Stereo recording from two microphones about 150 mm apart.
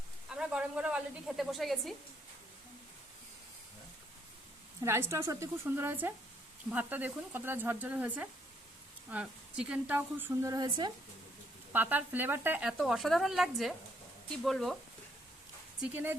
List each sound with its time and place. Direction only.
0.3 s speech: 5° right (ahead or behind)
4.8 s speech: 15° right (ahead or behind)
11.7 s speech: 10° right (ahead or behind)
15.8 s speech: 15° right (ahead or behind)